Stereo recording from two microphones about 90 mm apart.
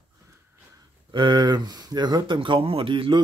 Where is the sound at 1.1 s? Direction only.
60° right (ahead or behind).